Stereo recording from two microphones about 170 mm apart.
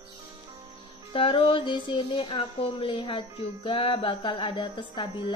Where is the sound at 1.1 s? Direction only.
30° left (ahead or behind).